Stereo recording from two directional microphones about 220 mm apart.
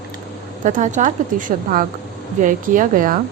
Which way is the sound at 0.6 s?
35° right (ahead or behind).